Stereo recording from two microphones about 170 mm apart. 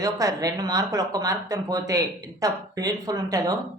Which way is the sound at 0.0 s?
20° right (ahead or behind).